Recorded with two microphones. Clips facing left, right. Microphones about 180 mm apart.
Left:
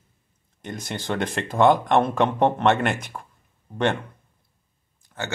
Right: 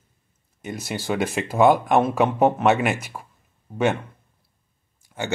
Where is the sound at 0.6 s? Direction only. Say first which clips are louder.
Right 2 dB; 5° right (ahead or behind).